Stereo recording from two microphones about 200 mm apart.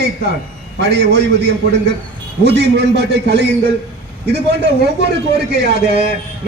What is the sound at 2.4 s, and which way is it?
A man's voice, 55° right (ahead or behind).